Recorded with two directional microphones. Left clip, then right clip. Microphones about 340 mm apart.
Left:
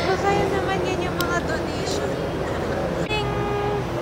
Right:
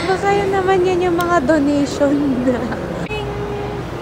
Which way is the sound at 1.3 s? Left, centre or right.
Centre.